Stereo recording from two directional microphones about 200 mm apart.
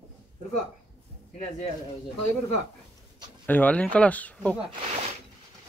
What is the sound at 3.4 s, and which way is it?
Speech, 10° left (ahead or behind).